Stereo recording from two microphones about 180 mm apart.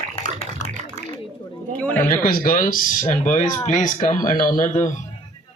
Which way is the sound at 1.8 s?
10° left (ahead or behind).